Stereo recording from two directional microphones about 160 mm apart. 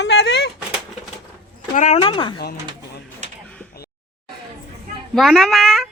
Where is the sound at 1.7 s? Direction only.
50° left (ahead or behind).